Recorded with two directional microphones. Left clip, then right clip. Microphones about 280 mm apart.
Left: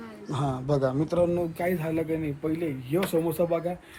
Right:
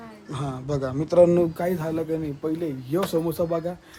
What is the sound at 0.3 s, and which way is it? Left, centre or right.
A man's voice, centre.